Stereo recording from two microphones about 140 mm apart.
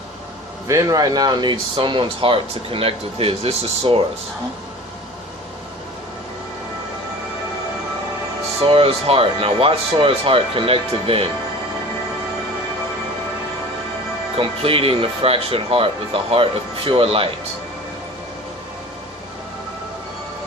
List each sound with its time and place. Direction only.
0.7 s speech: 25° right (ahead or behind); by 4.0 s 40° right (ahead or behind)
8.6 s speech: 45° right (ahead or behind)
14.3 s speech: 40° right (ahead or behind)